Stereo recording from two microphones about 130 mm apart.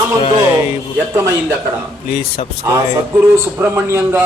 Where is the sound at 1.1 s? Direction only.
20° right (ahead or behind).